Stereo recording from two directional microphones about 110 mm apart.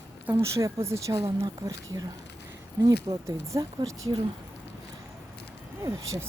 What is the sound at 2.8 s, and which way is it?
Speech, 25° right (ahead or behind).